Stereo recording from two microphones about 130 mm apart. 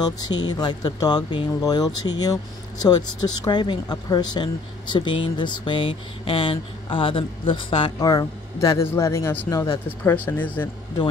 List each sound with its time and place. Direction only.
0.0 s speech: 30° left (ahead or behind); by 10.7 s 15° left (ahead or behind)